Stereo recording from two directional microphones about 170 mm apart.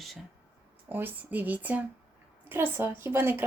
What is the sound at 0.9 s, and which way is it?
A woman's voice, 10° right (ahead or behind).